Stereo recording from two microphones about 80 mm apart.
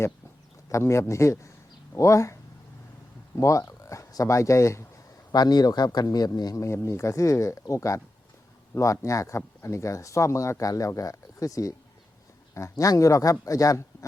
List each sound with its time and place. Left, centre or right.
0.7 s speech: left
3.4 s speech: left
5.3 s a man's voice: left